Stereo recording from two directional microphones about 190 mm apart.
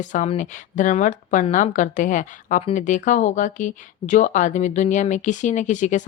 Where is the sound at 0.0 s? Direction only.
40° left (ahead or behind).